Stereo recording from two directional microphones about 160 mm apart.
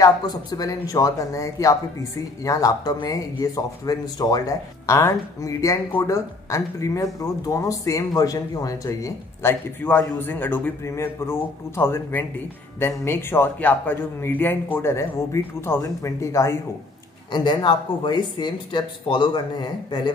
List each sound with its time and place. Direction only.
0.0 s speech: 25° left (ahead or behind)
17.3 s speech: 30° left (ahead or behind)